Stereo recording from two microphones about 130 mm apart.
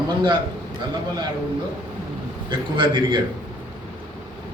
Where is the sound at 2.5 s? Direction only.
35° right (ahead or behind).